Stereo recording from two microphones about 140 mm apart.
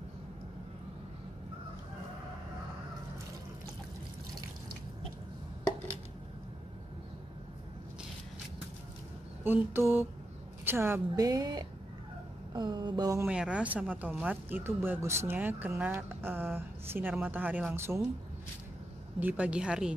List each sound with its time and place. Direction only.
9.4 s a woman's voice: 15° right (ahead or behind)
12.5 s a sound: 30° right (ahead or behind)
13.3 s speech: 5° right (ahead or behind)
19.1 s speech: 10° right (ahead or behind)